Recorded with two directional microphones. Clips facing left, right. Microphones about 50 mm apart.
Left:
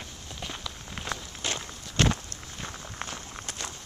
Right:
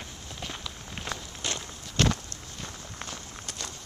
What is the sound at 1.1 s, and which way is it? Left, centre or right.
Walk, centre.